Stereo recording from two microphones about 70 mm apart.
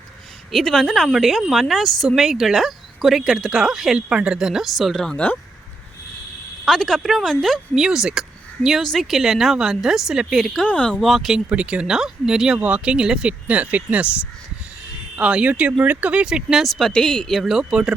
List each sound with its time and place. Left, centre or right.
0.5 s speech: centre
6.7 s speech: centre
8.8 s speech: centre
10.4 s speech: centre
10.7 s speech: centre
11.0 s speech: centre
11.3 s speech: centre
12.5 s speech: right
13.5 s speech: right
16.2 s speech: centre
16.6 s speech: centre
17.4 s speech: centre